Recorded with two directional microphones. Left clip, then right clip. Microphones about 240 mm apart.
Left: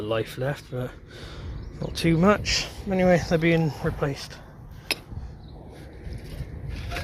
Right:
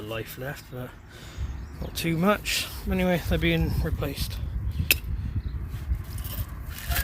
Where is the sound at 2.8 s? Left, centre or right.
Centre.